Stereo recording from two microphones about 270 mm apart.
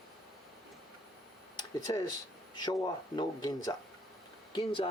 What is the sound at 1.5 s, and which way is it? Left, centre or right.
Speech, centre.